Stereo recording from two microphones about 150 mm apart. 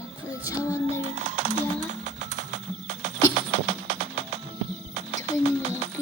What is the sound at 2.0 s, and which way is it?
Music, 50° right (ahead or behind).